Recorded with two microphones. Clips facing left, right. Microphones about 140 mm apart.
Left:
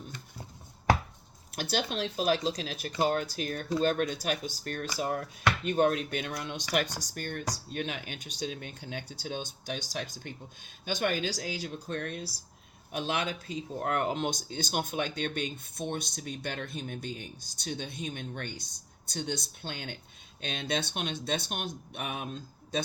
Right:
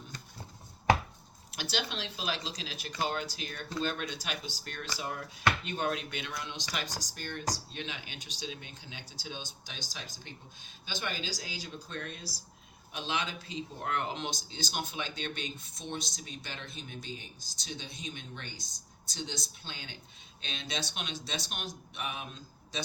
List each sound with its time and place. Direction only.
1.5 s speech: 50° left (ahead or behind)